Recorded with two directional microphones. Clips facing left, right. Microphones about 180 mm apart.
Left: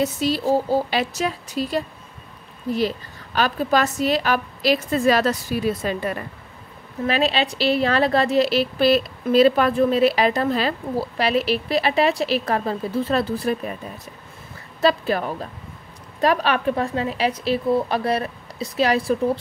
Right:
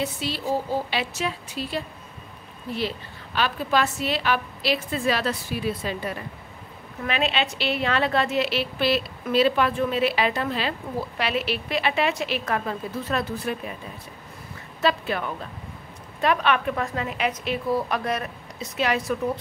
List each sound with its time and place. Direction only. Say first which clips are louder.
0.0 s a woman's voice: left 7 dB; 40° left (ahead or behind)
3.3 s a woman's voice: left 4 dB; 40° left (ahead or behind)
7.1 s a woman's voice: left 4 dB; 35° left (ahead or behind)
14.8 s a woman's voice: left 5 dB; 40° left (ahead or behind)